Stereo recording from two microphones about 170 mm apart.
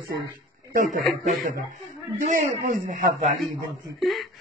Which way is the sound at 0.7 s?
45° right (ahead or behind).